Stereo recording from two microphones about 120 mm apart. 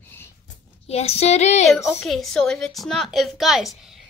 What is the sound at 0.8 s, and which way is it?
Speech, 60° left (ahead or behind).